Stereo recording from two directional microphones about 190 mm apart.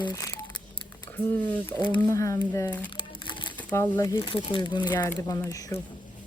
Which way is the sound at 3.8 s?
15° left (ahead or behind).